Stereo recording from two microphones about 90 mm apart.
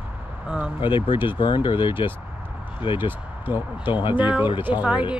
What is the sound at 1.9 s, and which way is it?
Speech, 20° right (ahead or behind).